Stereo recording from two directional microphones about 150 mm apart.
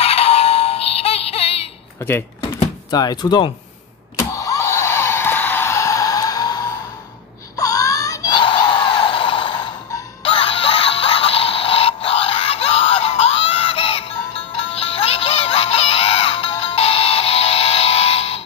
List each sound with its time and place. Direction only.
0.0 s synthetic singing: 40° left (ahead or behind)
2.0 s speech: 15° left (ahead or behind)
2.9 s speech: 25° left (ahead or behind)
4.2 s a sound: 20° left (ahead or behind); by 9.7 s 35° left (ahead or behind)
10.2 s music: 40° left (ahead or behind)